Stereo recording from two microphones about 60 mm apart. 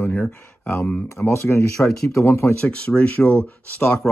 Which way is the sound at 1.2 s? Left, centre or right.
Left.